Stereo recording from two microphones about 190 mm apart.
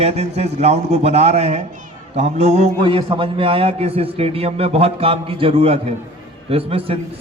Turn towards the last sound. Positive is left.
turn(degrees=-30)  # may be behind; listen again after turning